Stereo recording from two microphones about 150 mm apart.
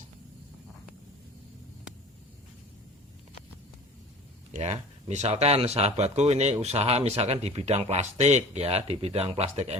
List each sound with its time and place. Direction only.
4.5 s speech: 45° right (ahead or behind)